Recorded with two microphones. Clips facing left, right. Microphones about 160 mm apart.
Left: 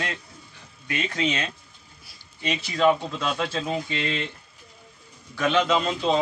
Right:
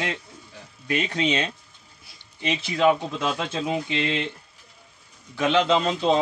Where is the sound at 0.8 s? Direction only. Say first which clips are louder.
Right 2 dB; 30° right (ahead or behind).